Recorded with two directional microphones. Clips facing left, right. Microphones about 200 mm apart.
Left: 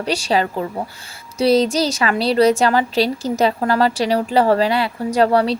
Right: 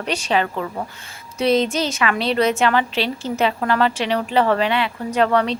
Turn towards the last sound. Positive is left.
turn(degrees=35)  # may be behind; listen again after turning